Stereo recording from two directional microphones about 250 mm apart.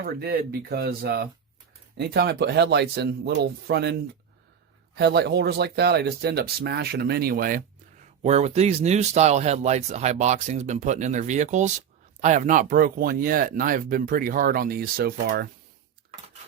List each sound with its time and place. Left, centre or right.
0.0 s speech: right
4.9 s speech: right